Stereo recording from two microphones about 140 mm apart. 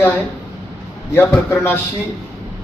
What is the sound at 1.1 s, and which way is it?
Speech, 15° left (ahead or behind).